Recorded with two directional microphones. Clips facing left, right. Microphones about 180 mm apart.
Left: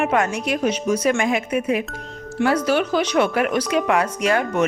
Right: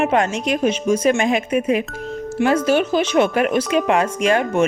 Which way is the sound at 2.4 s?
10° right (ahead or behind).